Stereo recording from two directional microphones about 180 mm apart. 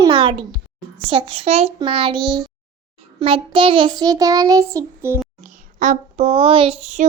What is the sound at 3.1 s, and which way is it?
Child singing, 30° right (ahead or behind).